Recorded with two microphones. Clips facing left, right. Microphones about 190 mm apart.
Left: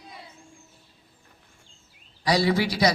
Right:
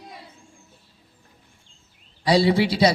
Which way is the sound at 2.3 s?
25° right (ahead or behind).